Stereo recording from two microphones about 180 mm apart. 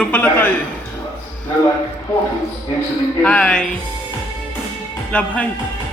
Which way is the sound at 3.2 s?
5° left (ahead or behind).